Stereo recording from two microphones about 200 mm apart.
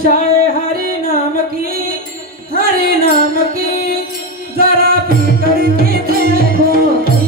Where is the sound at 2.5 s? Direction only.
50° right (ahead or behind).